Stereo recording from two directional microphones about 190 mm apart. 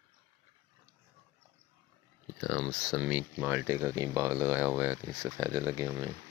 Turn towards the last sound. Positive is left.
turn(degrees=-20)  # may be behind; listen again after turning